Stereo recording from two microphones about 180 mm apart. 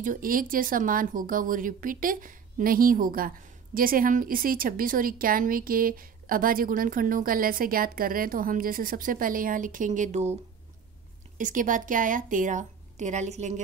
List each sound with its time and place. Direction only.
0.0 s speech: 50° right (ahead or behind)
11.3 s speech: 45° right (ahead or behind)